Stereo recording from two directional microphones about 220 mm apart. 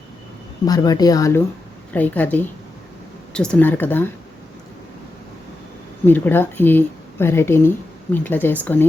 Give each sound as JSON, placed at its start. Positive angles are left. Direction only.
{"t": 0.6, "sound": "speech", "side_deg": 15}
{"t": 6.1, "sound": "speech", "side_deg": 10}